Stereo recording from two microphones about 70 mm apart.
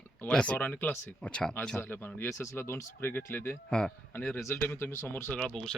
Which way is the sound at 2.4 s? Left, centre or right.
Left.